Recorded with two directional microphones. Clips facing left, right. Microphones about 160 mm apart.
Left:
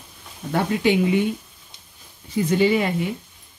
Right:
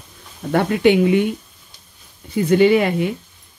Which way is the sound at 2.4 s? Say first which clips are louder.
Right 6 dB; 60° right (ahead or behind).